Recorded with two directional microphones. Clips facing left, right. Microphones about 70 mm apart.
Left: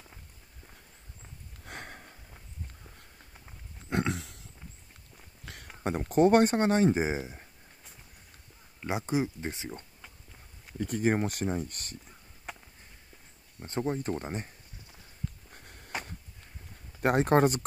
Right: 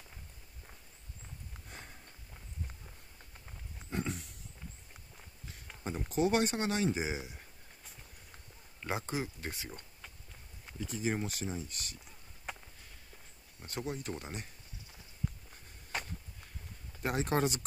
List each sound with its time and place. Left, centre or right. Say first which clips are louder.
1.7 s sniff: left 9 dB; left
3.9 s pig: left 7 dB; left
5.4 s a sound: left 7 dB; left
5.9 s speech: left 8 dB; left
8.8 s speech: left 7 dB; centre
10.8 s speech: left 8 dB; left
12.5 s a sound: left 1 dB; centre
13.6 s speech: left 8 dB; left
15.5 s walk: left 5 dB; left
17.0 s speech: left 8 dB; left